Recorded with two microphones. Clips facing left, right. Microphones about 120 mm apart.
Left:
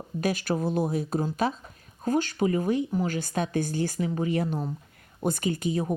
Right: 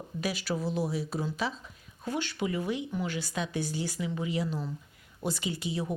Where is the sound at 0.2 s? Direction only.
50° left (ahead or behind).